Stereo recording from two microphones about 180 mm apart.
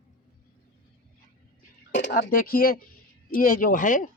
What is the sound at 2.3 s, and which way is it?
Speech, 50° left (ahead or behind).